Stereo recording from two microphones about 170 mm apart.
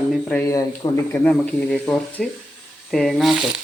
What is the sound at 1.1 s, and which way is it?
Speech, 10° left (ahead or behind).